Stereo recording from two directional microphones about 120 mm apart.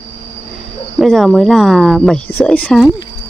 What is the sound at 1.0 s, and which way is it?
Speech, centre (ahead or behind).